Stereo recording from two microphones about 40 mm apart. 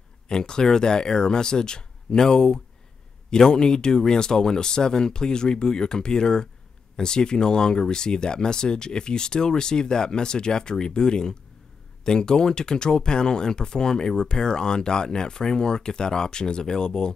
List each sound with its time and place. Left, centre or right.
0.3 s speech: centre